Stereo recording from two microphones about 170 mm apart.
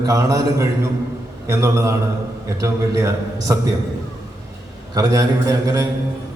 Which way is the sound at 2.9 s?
20° right (ahead or behind).